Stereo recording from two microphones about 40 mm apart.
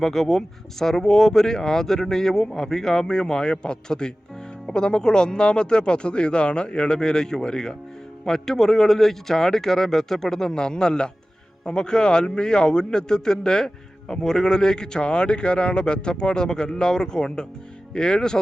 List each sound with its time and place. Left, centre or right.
0.0 s a man's voice: centre